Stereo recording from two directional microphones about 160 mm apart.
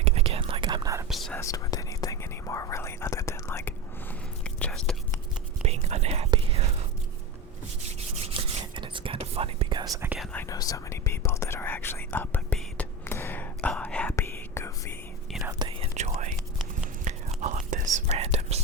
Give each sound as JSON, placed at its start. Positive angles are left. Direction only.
{"t": 0.0, "sound": "whispering", "side_deg": -40}
{"t": 1.1, "sound": "whispering", "side_deg": 0}
{"t": 1.4, "sound": "whispering", "side_deg": 20}
{"t": 4.4, "sound": "whispering", "side_deg": 5}
{"t": 5.6, "sound": "whispering", "side_deg": -40}
{"t": 8.3, "sound": "whispering", "side_deg": -35}
{"t": 10.3, "sound": "whispering", "side_deg": 20}
{"t": 15.5, "sound": "whispering", "side_deg": -30}
{"t": 16.0, "sound": "whispering", "side_deg": -45}
{"t": 18.2, "sound": "whispering", "side_deg": -40}